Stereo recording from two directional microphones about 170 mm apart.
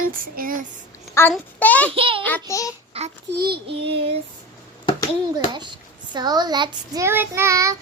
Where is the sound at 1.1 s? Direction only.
10° left (ahead or behind).